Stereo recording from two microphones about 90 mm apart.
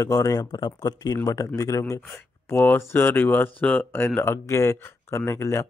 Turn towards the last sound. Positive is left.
turn(degrees=30)  # may be behind; listen again after turning